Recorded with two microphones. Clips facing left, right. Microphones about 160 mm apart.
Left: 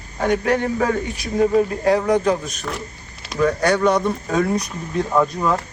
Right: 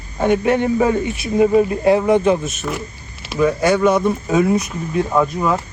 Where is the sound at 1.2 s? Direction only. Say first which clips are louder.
Right 3 dB; 10° right (ahead or behind).